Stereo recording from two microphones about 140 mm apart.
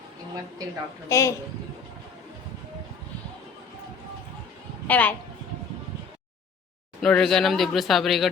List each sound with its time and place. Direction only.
0.6 s a woman's voice: 25° right (ahead or behind)
1.1 s a man's voice: 20° left (ahead or behind)
4.9 s speech: 10° left (ahead or behind)
7.0 s speech: 5° left (ahead or behind)